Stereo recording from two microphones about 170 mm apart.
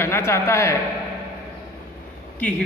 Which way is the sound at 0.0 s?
15° left (ahead or behind).